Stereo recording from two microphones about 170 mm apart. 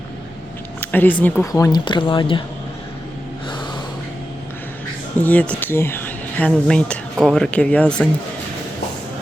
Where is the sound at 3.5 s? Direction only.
25° left (ahead or behind).